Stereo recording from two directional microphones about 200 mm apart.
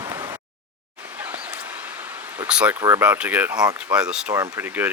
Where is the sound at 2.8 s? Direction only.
15° right (ahead or behind).